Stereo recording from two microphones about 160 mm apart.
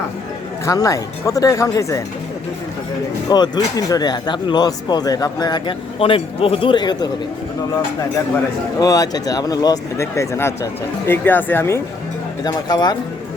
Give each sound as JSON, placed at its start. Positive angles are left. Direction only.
{"t": 0.6, "sound": "speech", "side_deg": 20}
{"t": 3.2, "sound": "speech", "side_deg": 25}
{"t": 8.8, "sound": "speech", "side_deg": 20}
{"t": 12.5, "sound": "speech", "side_deg": 25}